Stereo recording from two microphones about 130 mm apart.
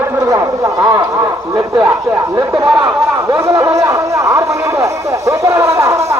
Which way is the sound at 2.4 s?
25° right (ahead or behind).